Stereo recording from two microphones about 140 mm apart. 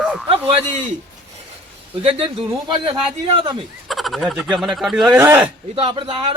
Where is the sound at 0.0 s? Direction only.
Centre (ahead or behind).